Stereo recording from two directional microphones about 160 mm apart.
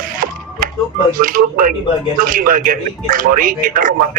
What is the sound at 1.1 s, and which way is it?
A man's voice, 60° right (ahead or behind).